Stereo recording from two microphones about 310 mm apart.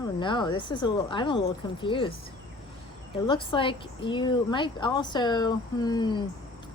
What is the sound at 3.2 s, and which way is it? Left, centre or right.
Speech, centre.